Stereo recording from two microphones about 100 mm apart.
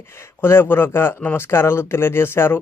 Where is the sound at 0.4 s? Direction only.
25° left (ahead or behind).